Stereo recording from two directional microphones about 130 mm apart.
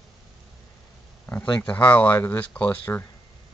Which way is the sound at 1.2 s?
15° left (ahead or behind).